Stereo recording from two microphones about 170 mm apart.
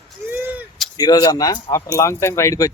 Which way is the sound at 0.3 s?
10° right (ahead or behind).